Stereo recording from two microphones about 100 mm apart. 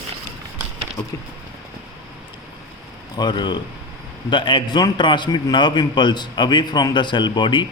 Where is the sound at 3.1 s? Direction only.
45° left (ahead or behind).